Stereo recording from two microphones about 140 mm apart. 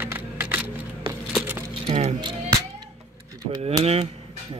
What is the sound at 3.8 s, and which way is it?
Speech, 45° right (ahead or behind).